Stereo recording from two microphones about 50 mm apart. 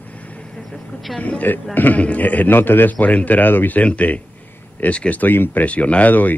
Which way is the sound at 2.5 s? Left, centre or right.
Left.